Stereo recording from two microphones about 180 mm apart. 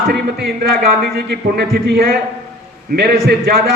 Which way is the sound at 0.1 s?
60° right (ahead or behind).